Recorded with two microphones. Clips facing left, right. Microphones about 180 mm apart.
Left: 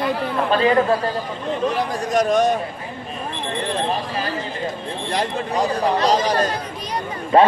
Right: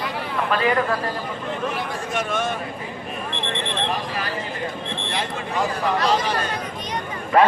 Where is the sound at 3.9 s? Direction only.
25° left (ahead or behind).